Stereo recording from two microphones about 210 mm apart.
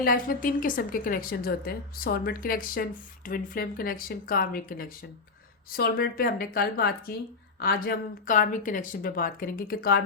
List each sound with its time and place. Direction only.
0.0 s a woman's voice: 45° left (ahead or behind)